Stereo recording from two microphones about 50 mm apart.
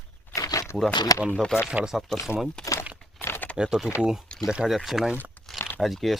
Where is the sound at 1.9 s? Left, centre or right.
Centre.